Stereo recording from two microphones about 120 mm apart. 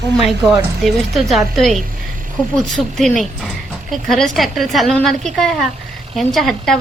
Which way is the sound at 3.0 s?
Centre (ahead or behind).